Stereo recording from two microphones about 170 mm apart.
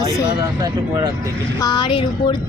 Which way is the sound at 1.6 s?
25° left (ahead or behind).